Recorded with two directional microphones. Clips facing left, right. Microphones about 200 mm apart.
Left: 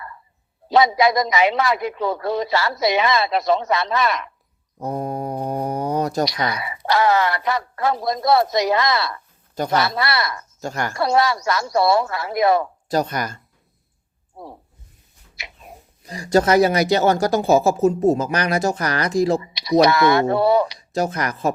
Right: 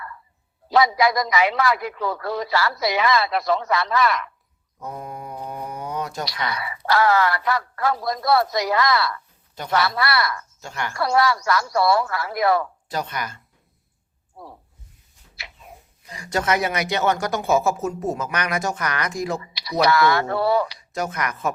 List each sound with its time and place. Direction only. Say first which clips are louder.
0.7 s speech: left 2 dB; 20° left (ahead or behind)
4.8 s mantra: left 8 dB; 35° left (ahead or behind)
5.5 s a sound: left 8 dB; 40° left (ahead or behind)
6.5 s speech: left 1 dB; 20° left (ahead or behind)
10.6 s speech: left 7 dB; 40° left (ahead or behind)
10.9 s speech: left 1 dB; 20° left (ahead or behind)
12.9 s speech: left 8 dB; 40° left (ahead or behind)
14.3 s snake: left 4 dB; 20° left (ahead or behind)
15.4 s tick-tock: left 3 dB; 20° left (ahead or behind)
16.0 s speech: left 7 dB; 35° left (ahead or behind)
19.5 s speech: left 3 dB; 20° left (ahead or behind)
20.7 s speech: left 5 dB; 35° left (ahead or behind)